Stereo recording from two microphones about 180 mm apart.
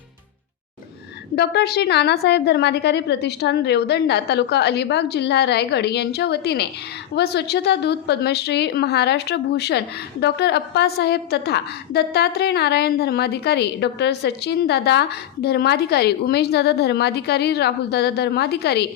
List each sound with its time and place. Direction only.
1.4 s a woman's voice: 65° left (ahead or behind)